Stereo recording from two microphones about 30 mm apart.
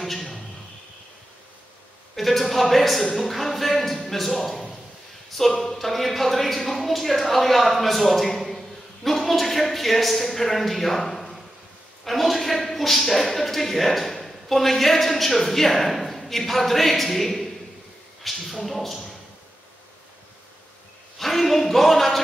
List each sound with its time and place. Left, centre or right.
0.0 s a sound: centre
2.1 s a man's voice: centre
21.2 s speech: centre